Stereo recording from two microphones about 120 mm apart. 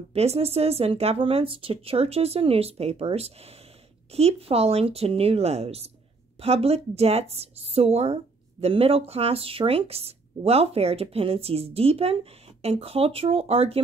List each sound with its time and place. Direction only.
0.1 s a woman's voice: 60° right (ahead or behind)